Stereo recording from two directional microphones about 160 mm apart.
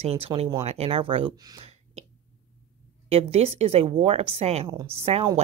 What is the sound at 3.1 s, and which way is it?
Speech, 40° right (ahead or behind).